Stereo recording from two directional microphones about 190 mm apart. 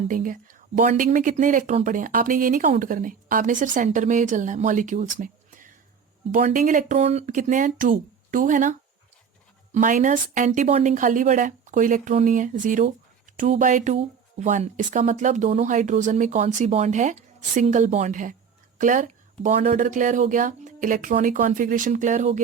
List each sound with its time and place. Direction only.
0.1 s speech: 45° right (ahead or behind)
9.7 s speech: 40° right (ahead or behind)